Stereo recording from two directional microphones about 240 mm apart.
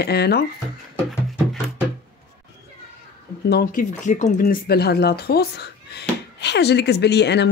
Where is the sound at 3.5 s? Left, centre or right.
Left.